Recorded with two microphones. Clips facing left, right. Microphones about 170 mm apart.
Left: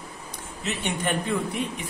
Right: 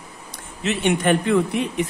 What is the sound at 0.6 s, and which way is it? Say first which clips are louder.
Speech: right 9 dB; 80° right.